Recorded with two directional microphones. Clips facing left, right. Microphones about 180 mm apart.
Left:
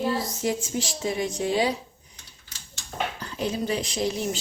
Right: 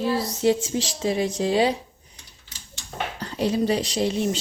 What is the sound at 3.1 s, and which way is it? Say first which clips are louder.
Speech: right 9 dB; 30° right (ahead or behind).